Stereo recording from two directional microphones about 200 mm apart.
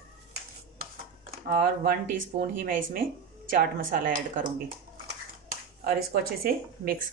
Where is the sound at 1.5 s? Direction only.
45° right (ahead or behind).